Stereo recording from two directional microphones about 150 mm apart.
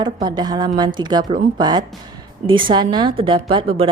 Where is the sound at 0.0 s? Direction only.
30° right (ahead or behind).